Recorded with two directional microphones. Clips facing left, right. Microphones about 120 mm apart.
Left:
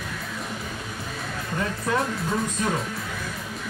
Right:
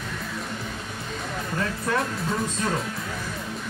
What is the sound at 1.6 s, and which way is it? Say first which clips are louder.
Speech: left 1 dB; 20° left (ahead or behind).